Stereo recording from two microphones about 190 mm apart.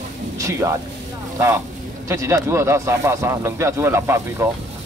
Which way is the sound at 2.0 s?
15° right (ahead or behind).